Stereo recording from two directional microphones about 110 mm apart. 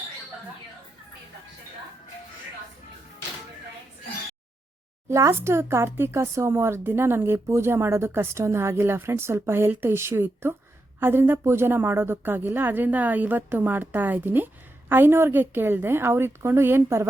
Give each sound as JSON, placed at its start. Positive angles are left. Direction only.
{"t": 5.0, "sound": "a woman's voice", "side_deg": -25}